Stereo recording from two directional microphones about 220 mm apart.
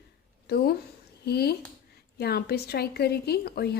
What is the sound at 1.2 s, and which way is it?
A woman's voice, 45° left (ahead or behind).